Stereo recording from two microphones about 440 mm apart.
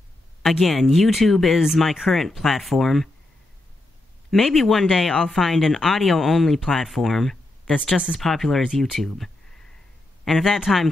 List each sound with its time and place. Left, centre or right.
0.4 s speech: centre
4.3 s speech: centre